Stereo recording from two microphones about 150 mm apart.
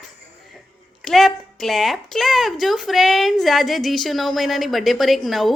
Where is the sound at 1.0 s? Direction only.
Centre (ahead or behind).